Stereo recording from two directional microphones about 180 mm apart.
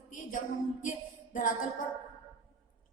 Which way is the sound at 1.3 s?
50° left (ahead or behind).